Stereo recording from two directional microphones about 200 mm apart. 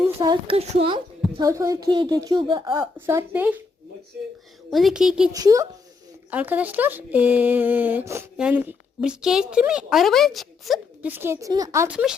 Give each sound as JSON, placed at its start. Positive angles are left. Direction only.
{"t": 0.2, "sound": "a child's voice", "side_deg": -25}
{"t": 1.4, "sound": "speech", "side_deg": -15}
{"t": 2.7, "sound": "speech", "side_deg": -10}
{"t": 4.7, "sound": "a woman's voice", "side_deg": 0}
{"t": 5.3, "sound": "speech", "side_deg": -15}
{"t": 11.1, "sound": "speech", "side_deg": -10}